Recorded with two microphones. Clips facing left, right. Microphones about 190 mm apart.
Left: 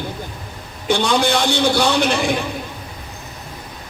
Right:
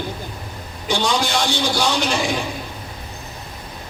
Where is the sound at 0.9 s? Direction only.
60° left (ahead or behind).